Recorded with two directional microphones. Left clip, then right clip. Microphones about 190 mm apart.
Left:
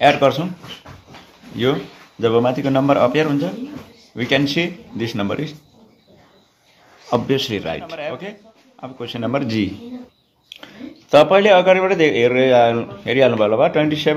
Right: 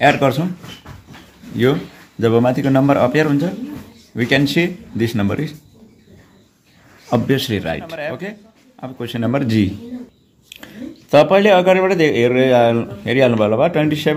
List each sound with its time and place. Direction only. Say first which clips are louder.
0.0 s speech: even; 30° right (ahead or behind)
1.6 s a man's voice: right 2 dB; 35° right (ahead or behind)
7.1 s a man's voice: right 1 dB; 25° right (ahead or behind)